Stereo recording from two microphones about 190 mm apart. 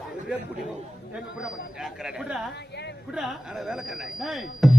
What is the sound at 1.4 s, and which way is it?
Speech, centre (ahead or behind).